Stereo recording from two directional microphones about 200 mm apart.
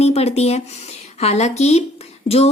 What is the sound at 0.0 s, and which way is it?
Speech, 30° left (ahead or behind).